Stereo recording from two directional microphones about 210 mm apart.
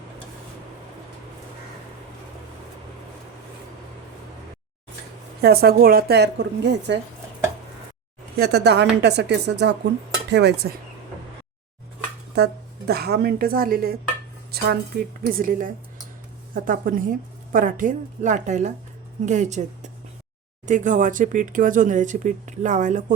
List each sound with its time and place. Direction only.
5.4 s a woman's voice: 45° right (ahead or behind)
8.4 s a woman's voice: 50° right (ahead or behind)
12.9 s a woman's voice: 50° right (ahead or behind); by 19.6 s 35° right (ahead or behind)
20.7 s speech: 35° right (ahead or behind)